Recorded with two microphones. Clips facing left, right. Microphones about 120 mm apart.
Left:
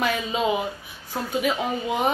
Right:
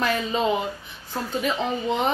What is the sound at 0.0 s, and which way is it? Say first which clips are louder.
Speech: right 1 dB; 10° left (ahead or behind).